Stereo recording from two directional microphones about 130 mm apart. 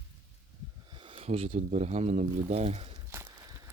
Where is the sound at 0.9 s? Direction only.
45° right (ahead or behind).